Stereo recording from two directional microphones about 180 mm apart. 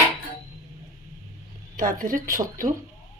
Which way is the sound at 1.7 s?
50° right (ahead or behind).